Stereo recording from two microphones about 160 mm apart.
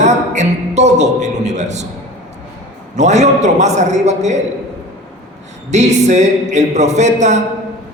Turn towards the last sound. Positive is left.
turn(degrees=-45)  # may be behind; listen again after turning